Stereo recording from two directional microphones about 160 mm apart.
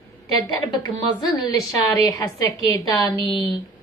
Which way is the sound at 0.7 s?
25° left (ahead or behind).